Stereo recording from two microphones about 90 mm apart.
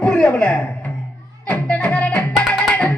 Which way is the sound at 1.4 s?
15° left (ahead or behind).